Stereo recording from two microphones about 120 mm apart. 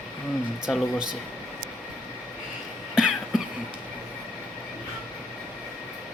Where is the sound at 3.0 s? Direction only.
5° right (ahead or behind).